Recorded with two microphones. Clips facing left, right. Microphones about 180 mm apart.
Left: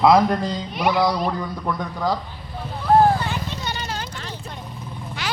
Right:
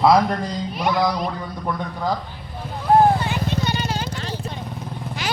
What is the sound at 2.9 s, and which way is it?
Vehicle, 15° right (ahead or behind).